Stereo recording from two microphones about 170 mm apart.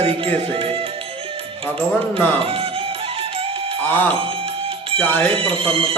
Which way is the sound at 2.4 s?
35° right (ahead or behind).